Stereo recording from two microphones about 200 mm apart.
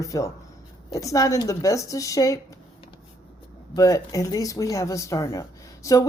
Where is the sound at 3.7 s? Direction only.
15° left (ahead or behind).